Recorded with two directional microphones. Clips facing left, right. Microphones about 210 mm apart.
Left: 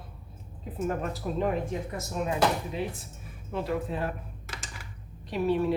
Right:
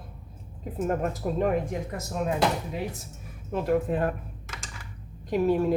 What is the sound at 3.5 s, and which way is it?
Speech, 50° right (ahead or behind).